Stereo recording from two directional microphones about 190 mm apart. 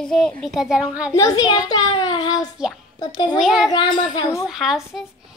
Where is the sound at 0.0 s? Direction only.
5° left (ahead or behind).